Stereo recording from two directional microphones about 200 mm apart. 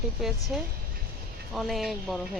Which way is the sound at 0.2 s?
Centre (ahead or behind).